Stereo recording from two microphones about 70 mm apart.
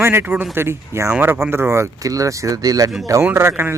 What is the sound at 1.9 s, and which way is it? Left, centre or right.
Speech, right.